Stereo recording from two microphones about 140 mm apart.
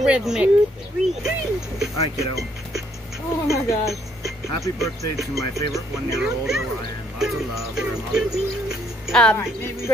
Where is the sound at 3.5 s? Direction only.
20° left (ahead or behind).